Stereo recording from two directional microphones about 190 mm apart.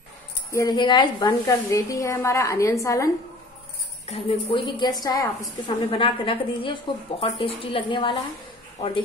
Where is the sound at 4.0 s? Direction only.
35° left (ahead or behind).